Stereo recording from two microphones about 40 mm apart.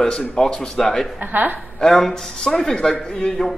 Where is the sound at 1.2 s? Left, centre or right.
Right.